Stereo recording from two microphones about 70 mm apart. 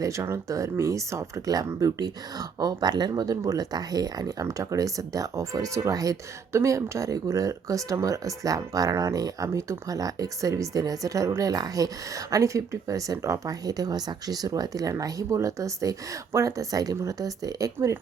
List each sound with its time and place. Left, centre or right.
0.0 s speech: right
6.5 s speech: right